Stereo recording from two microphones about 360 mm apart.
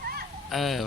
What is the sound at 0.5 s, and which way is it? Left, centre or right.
Speech, centre.